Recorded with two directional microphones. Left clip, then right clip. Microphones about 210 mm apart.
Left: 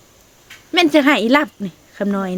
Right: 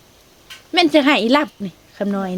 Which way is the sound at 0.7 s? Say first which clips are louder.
Left 1 dB; 15° left (ahead or behind).